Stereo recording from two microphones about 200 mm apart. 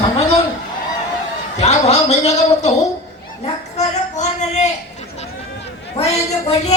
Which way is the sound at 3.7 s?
35° left (ahead or behind).